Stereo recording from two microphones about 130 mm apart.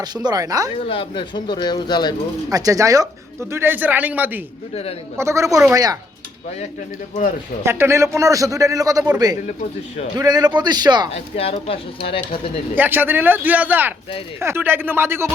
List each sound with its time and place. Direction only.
0.3 s a man's voice: 30° right (ahead or behind)
0.9 s speech: 40° left (ahead or behind)
2.5 s a man's voice: 25° right (ahead or behind)
4.7 s speech: 50° left (ahead or behind)
5.1 s a man's voice: 20° right (ahead or behind)
7.6 s a man's voice: 20° right (ahead or behind)
9.5 s speech: 60° left (ahead or behind)
10.2 s a man's voice: 30° right (ahead or behind)
11.1 s speech: 50° left (ahead or behind)
12.7 s speech: 15° right (ahead or behind)